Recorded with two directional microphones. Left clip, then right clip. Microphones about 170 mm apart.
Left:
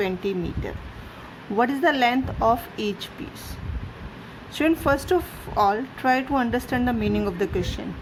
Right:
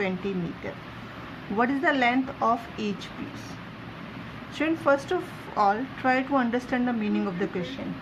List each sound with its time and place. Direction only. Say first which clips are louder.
0.2 s a woman's voice: left 5 dB; 35° left (ahead or behind)
1.5 s a woman's voice: left 3 dB; 35° left (ahead or behind)
4.5 s a woman's voice: left 2 dB; 40° left (ahead or behind)